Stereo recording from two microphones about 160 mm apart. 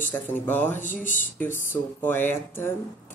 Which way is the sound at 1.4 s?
10° left (ahead or behind).